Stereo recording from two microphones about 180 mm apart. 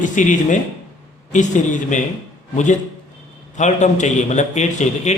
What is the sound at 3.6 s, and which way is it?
A man's voice, 40° left (ahead or behind).